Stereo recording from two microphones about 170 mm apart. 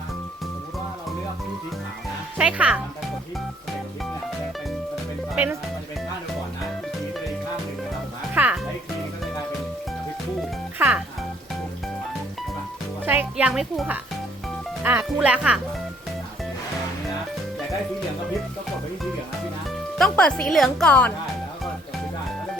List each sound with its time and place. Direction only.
2.4 s speech: 5° right (ahead or behind)
5.3 s speech: 10° right (ahead or behind)
8.4 s music: 10° right (ahead or behind)
10.8 s music: 5° right (ahead or behind)
13.1 s speech: 10° right (ahead or behind)
20.0 s a woman's voice: 5° left (ahead or behind)